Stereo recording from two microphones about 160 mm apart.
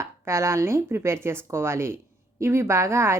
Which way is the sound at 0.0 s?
15° right (ahead or behind).